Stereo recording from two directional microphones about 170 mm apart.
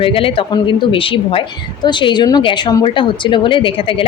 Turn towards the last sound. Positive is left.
turn(degrees=30)  # may be behind; listen again after turning